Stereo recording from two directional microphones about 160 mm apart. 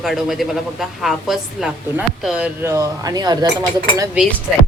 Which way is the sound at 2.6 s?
20° right (ahead or behind).